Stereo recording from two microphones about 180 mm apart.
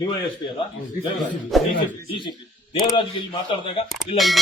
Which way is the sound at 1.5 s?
Centre (ahead or behind).